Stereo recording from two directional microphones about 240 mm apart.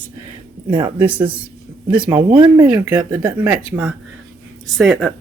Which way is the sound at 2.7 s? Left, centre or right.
Centre.